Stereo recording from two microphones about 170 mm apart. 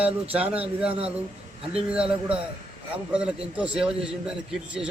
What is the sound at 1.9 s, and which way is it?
A man's voice, 5° right (ahead or behind).